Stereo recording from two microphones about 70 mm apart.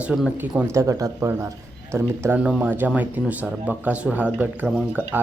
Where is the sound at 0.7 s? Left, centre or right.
Right.